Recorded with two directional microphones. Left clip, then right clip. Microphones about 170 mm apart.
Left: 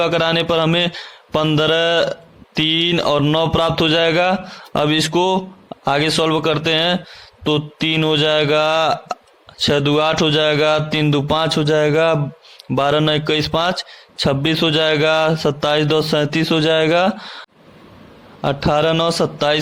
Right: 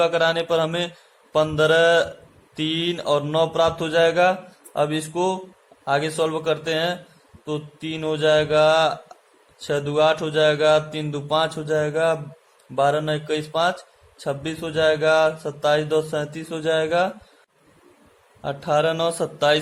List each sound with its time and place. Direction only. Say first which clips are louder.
0.0 s mantra: left 3 dB; 35° left (ahead or behind)
12.7 s a man's voice: left 4 dB; 45° left (ahead or behind)
18.4 s mantra: left 5 dB; 35° left (ahead or behind)